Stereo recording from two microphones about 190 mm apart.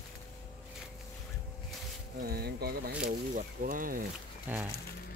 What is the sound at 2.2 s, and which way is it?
Speech, 55° right (ahead or behind).